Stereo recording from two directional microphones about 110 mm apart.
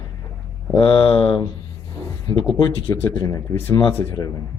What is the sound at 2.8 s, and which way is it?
Speech, 20° left (ahead or behind).